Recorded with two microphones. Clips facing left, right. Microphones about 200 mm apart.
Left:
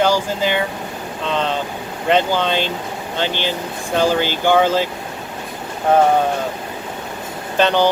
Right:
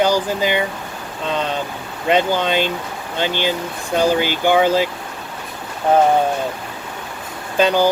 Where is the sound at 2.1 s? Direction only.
15° right (ahead or behind).